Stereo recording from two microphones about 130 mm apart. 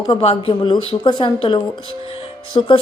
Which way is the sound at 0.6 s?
35° left (ahead or behind).